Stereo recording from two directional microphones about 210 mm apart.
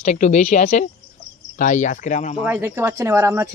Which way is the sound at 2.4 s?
10° right (ahead or behind).